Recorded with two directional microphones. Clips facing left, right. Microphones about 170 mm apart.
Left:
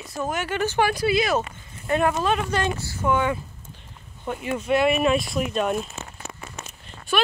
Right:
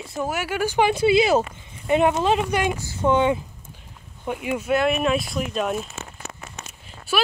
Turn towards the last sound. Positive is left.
turn(degrees=-5)  # may be behind; listen again after turning